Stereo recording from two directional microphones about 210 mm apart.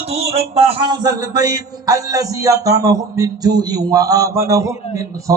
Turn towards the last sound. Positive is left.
turn(degrees=-15)  # may be behind; listen again after turning